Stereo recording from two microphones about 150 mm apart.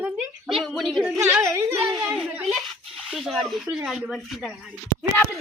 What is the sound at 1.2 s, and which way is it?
Speech, 15° right (ahead or behind).